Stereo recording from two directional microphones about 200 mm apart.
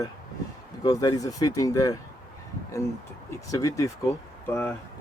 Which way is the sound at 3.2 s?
15° left (ahead or behind).